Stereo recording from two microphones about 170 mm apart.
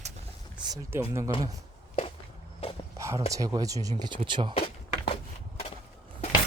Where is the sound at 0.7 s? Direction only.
15° right (ahead or behind).